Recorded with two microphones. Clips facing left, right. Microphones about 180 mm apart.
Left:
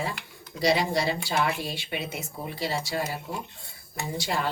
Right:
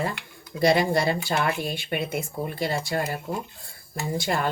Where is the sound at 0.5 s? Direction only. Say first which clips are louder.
Right 4 dB; 55° right (ahead or behind).